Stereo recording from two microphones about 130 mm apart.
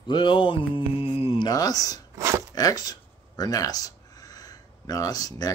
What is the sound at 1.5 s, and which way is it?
Speech, 30° left (ahead or behind).